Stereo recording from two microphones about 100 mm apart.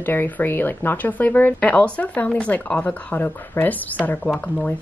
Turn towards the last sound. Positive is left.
turn(degrees=10)  # may be behind; listen again after turning